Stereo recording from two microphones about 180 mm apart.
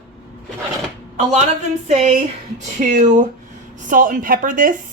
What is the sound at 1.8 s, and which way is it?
Speech, 40° right (ahead or behind).